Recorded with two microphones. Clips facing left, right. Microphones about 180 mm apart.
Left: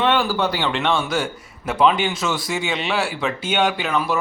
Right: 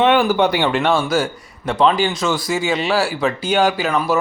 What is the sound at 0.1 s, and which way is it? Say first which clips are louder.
Speech: right 5 dB; 15° right (ahead or behind).